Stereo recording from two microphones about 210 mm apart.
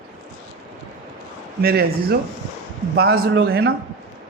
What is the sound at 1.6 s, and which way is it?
Speech, 45° right (ahead or behind).